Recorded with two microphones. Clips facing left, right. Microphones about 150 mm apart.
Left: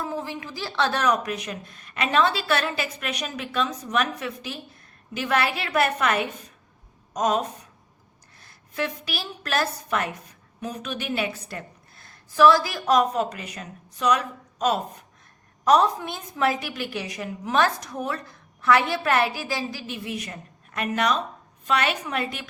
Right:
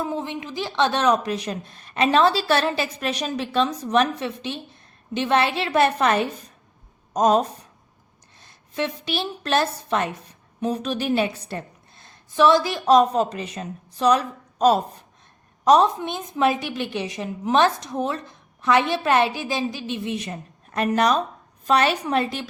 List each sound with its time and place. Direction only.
0.0 s speech: 20° right (ahead or behind)
8.4 s a woman's voice: 25° right (ahead or behind)
15.6 s a woman's voice: 20° right (ahead or behind)